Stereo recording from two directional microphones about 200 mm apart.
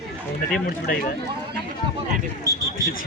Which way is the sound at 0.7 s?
45° left (ahead or behind).